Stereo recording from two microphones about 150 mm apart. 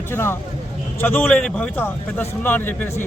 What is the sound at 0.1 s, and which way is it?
A man's voice, 15° left (ahead or behind).